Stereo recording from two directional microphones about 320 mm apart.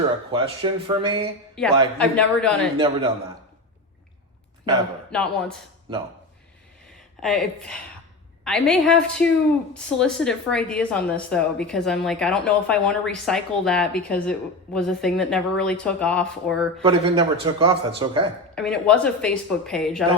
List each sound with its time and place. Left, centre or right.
0.3 s a man's voice: centre
2.0 s speech: centre
2.7 s a man's voice: centre
5.1 s speech: centre
5.9 s a man's voice: centre
7.2 s speech: centre
16.8 s a man's voice: centre
18.5 s speech: centre